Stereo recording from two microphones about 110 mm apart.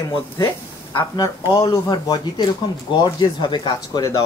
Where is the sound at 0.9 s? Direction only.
35° left (ahead or behind).